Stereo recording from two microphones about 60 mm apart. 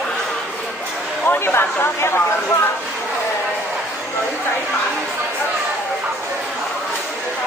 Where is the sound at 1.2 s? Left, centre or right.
Left.